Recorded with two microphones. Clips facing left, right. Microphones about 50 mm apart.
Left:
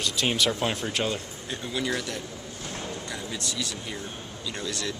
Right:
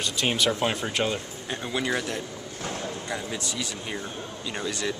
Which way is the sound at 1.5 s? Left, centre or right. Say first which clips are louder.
Right 2 dB; right.